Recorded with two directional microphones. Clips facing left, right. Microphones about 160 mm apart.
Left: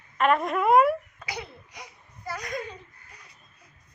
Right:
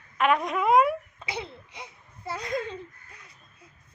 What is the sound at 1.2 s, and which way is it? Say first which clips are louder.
Speech: right 2 dB; 25° right (ahead or behind).